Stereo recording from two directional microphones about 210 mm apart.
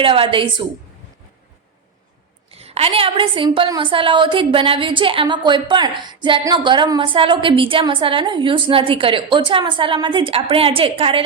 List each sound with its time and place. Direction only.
0.0 s a woman's voice: 25° right (ahead or behind)
2.5 s a woman's voice: 30° right (ahead or behind)